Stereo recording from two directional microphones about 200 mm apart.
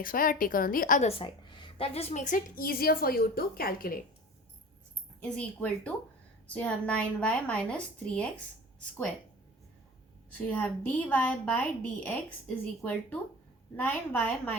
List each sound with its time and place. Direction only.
0.0 s a woman's voice: 45° left (ahead or behind)
1.2 s a woman's voice: 25° left (ahead or behind); by 4.0 s 45° left (ahead or behind)
5.4 s a woman's voice: 5° left (ahead or behind)
10.3 s a woman's voice: 5° left (ahead or behind)